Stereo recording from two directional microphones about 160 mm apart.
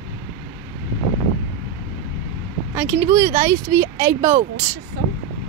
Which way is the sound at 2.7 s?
15° right (ahead or behind).